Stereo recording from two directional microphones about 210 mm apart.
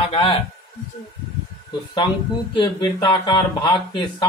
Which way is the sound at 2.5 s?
20° left (ahead or behind).